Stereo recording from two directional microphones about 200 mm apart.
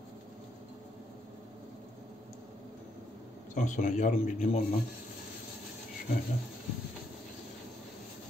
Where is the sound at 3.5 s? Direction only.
40° left (ahead or behind).